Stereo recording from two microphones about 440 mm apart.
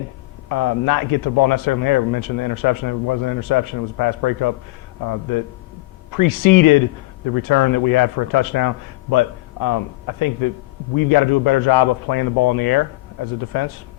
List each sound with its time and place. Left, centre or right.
0.4 s a man's voice: left